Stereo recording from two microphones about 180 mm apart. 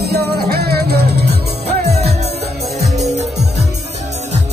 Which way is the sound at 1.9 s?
35° right (ahead or behind).